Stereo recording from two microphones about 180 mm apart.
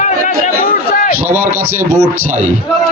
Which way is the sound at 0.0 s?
45° left (ahead or behind).